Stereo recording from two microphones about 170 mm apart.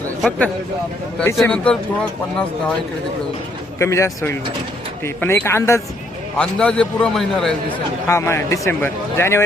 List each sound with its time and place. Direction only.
0.2 s a man's voice: 10° left (ahead or behind)
3.8 s a man's voice: 15° left (ahead or behind)
6.3 s a man's voice: 5° left (ahead or behind)
8.0 s a man's voice: 15° left (ahead or behind)